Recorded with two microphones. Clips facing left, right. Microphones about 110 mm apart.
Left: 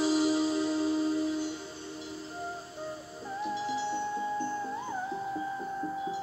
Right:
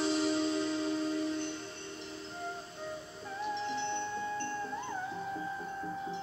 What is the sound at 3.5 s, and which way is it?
Music, 5° left (ahead or behind).